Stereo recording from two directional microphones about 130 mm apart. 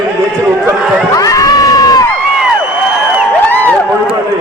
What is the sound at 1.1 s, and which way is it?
Crowd, 25° left (ahead or behind).